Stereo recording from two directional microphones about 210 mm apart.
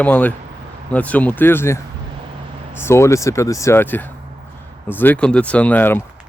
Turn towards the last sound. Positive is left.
turn(degrees=10)  # may be behind; listen again after turning